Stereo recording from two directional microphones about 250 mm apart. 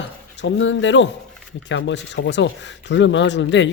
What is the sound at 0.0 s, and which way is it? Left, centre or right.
Speech, left.